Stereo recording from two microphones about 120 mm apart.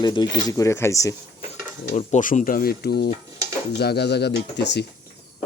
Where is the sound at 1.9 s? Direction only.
80° left.